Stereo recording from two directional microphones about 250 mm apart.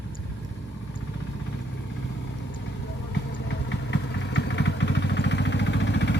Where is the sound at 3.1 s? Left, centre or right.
Left.